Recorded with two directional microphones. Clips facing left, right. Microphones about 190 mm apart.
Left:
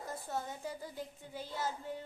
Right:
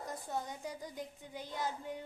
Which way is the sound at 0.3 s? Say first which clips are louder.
Left 1 dB; 15° right (ahead or behind).